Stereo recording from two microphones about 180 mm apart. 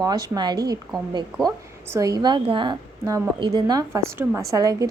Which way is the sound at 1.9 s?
20° right (ahead or behind).